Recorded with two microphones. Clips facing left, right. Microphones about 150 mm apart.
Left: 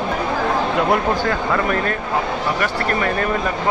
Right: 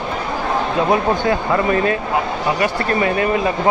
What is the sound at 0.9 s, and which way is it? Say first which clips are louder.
Speech: right 2 dB; 15° right (ahead or behind).